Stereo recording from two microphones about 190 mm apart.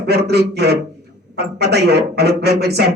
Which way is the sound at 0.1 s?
60° right (ahead or behind).